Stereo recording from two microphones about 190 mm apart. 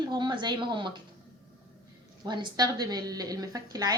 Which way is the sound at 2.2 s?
25° right (ahead or behind).